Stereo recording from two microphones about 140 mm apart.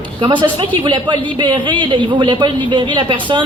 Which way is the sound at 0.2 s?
35° right (ahead or behind).